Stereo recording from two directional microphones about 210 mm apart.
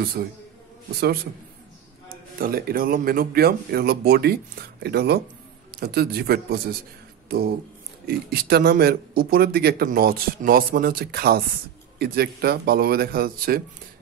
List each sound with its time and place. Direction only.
0.2 s speech: 45° right (ahead or behind)
2.3 s speech: 45° right (ahead or behind)